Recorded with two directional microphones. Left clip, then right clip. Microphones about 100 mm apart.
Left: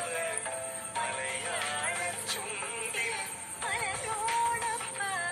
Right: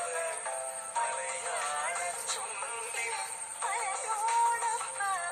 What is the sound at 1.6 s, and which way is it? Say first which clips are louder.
Music: even; 20° left (ahead or behind).